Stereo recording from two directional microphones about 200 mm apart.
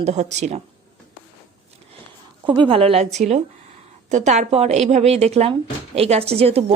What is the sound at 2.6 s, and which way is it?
A woman's voice, 30° right (ahead or behind).